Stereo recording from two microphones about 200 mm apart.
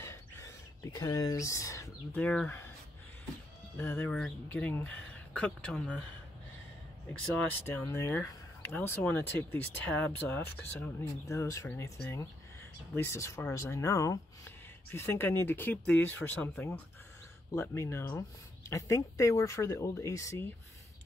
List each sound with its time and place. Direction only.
0.0 s a sound: 15° left (ahead or behind)
0.9 s speech: 20° left (ahead or behind)
3.7 s speech: 10° left (ahead or behind)
7.2 s speech: 5° left (ahead or behind)
12.9 s speech: 15° left (ahead or behind)